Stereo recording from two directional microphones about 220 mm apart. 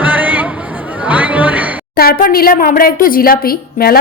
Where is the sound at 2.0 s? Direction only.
40° left (ahead or behind).